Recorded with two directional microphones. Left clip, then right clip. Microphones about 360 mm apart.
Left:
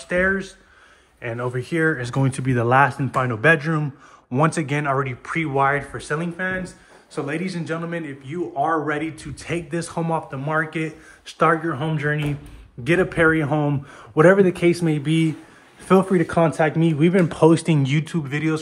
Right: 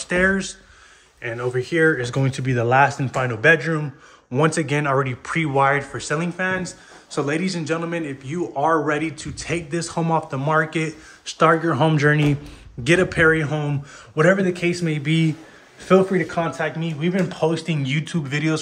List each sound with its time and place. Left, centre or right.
0.0 s speech: centre